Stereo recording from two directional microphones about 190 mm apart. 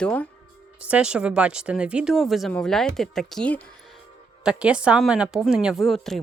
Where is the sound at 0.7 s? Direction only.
5° right (ahead or behind).